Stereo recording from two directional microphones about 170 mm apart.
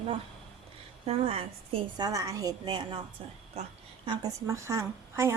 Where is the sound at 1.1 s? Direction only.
35° right (ahead or behind).